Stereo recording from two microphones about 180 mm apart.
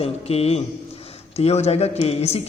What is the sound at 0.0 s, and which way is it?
A man's voice, 35° left (ahead or behind).